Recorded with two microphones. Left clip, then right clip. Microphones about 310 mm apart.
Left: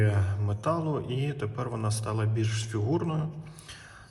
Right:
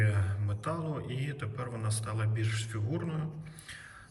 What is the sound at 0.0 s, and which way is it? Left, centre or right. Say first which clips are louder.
A man's voice: left 4 dB; centre.